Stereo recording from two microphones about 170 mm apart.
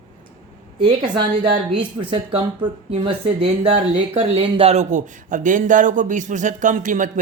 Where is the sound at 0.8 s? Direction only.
30° right (ahead or behind).